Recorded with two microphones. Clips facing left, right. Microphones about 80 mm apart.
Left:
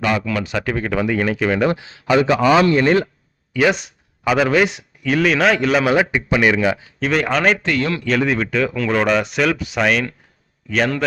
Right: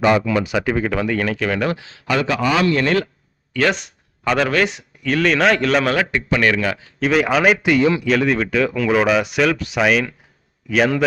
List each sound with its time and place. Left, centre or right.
0.2 s a man's voice: centre
7.0 s a man's voice: centre